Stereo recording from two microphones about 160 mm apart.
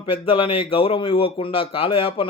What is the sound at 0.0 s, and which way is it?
Speech, 35° left (ahead or behind).